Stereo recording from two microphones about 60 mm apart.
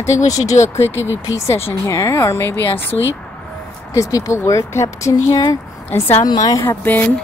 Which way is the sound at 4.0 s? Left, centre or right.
Left.